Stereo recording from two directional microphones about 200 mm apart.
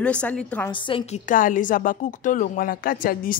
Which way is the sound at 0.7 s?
25° left (ahead or behind).